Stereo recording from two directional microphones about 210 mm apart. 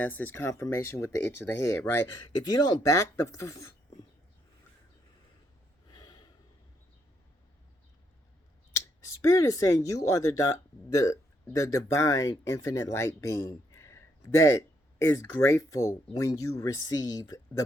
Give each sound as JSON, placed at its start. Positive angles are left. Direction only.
{"t": 0.0, "sound": "speech", "side_deg": 10}
{"t": 5.9, "sound": "snort", "side_deg": 20}
{"t": 8.7, "sound": "speech", "side_deg": 15}